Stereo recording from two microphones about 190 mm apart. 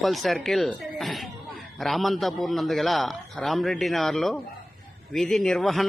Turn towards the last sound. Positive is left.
turn(degrees=0)  # may be behind; listen again after turning